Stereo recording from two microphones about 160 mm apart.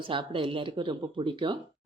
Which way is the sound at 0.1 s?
30° right (ahead or behind).